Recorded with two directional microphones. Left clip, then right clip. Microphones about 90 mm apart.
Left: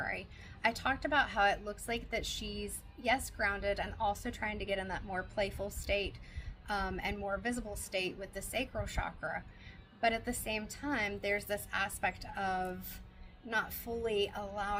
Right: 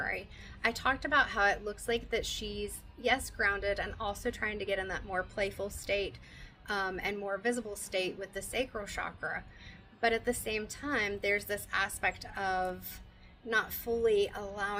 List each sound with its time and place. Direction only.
0.0 s a woman's voice: 40° right (ahead or behind)